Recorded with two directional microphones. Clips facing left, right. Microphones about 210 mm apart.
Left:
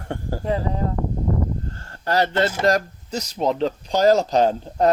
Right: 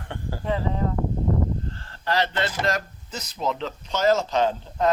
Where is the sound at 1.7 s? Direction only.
45° left (ahead or behind).